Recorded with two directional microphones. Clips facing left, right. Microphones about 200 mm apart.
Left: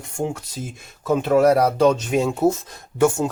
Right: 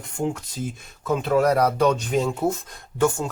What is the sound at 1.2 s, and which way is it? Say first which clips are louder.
Speech: left 3 dB; 30° left (ahead or behind).